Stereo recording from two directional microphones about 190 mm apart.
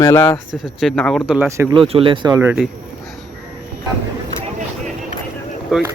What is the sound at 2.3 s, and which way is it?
Speech, 10° right (ahead or behind).